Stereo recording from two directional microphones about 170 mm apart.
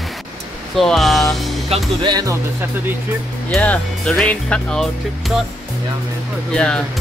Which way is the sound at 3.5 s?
5° left (ahead or behind).